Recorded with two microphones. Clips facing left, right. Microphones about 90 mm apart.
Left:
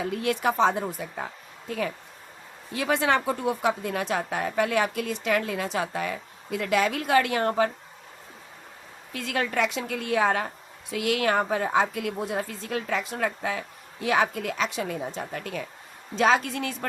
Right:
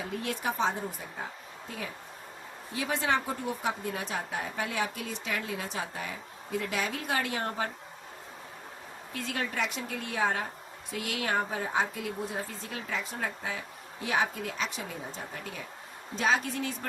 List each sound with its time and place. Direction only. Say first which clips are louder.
0.2 s speech: left 8 dB; 80° left
2.7 s a woman's voice: left 5 dB; 75° left (ahead or behind); by 7.7 s 90° left
9.1 s a woman's voice: left 6 dB; 90° left; by 15.6 s 70° left (ahead or behind)
16.1 s speech: left 6 dB; 85° left